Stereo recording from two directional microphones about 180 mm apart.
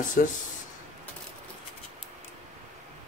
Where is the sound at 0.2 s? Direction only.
50° left (ahead or behind).